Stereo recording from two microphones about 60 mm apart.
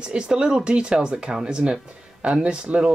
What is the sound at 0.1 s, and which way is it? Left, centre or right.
Speech, centre.